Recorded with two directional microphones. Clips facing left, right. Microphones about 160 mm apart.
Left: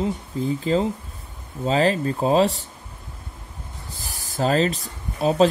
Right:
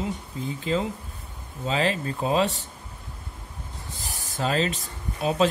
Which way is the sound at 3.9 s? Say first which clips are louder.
Left 5 dB; 35° left (ahead or behind).